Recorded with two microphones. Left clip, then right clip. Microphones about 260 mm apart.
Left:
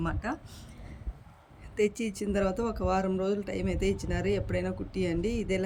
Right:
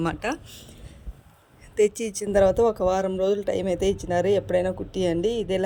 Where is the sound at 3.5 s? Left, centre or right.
Right.